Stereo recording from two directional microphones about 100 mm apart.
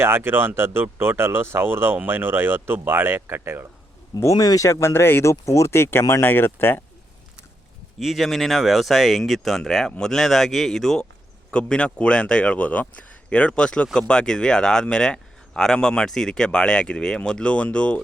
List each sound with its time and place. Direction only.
0.0 s speech: 25° right (ahead or behind)
4.2 s speech: 35° left (ahead or behind)
7.9 s speech: centre (ahead or behind)